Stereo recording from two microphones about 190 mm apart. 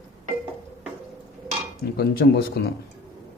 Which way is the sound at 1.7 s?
55° left (ahead or behind).